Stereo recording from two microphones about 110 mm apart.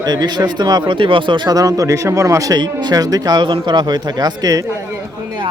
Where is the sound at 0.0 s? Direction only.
40° right (ahead or behind).